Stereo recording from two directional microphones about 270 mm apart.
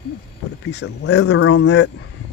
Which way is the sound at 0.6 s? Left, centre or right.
Left.